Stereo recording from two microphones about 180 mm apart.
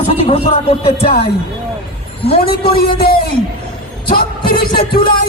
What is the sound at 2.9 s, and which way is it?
Speech, 55° left (ahead or behind).